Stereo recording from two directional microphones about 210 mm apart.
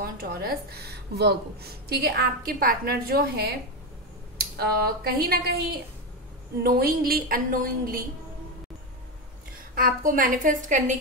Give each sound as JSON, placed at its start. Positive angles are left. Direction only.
{"t": 0.0, "sound": "a woman's voice", "side_deg": -45}
{"t": 9.8, "sound": "a woman's voice", "side_deg": -40}